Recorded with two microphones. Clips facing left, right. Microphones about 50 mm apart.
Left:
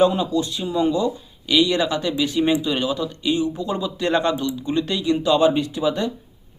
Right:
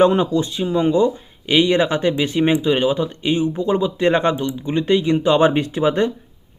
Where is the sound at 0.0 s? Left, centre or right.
Right.